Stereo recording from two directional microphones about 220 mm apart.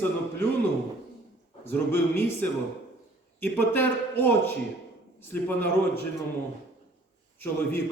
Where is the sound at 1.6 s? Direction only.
10° left (ahead or behind).